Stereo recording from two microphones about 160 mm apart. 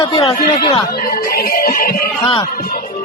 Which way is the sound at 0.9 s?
65° left (ahead or behind).